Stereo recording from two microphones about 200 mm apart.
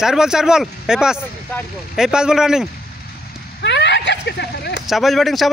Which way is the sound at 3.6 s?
60° left (ahead or behind).